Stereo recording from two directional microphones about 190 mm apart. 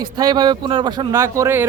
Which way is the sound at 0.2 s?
20° right (ahead or behind).